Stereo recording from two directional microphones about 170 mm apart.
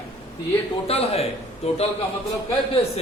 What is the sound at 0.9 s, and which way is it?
Speech, 35° left (ahead or behind).